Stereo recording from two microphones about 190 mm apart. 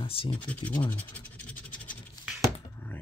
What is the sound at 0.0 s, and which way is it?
Speech, 30° left (ahead or behind).